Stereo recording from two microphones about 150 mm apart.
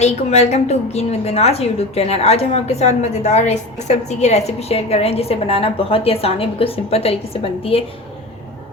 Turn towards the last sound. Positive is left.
turn(degrees=40)  # may be behind; listen again after turning